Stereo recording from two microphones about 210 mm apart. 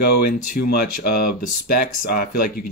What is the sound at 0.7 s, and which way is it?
Speech, 45° left (ahead or behind).